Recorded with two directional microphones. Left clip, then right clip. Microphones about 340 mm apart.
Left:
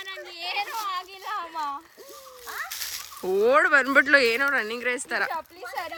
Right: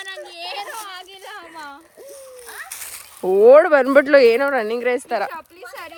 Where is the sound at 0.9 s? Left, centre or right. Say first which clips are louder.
Left 4 dB; left.